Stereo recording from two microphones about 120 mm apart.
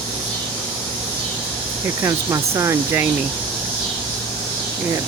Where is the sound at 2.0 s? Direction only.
25° right (ahead or behind).